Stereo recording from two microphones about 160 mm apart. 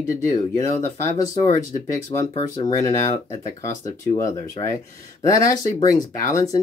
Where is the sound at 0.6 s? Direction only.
15° left (ahead or behind); by 2.3 s 30° left (ahead or behind).